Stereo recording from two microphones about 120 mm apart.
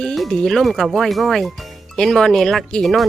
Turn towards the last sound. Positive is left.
turn(degrees=5)  # may be behind; listen again after turning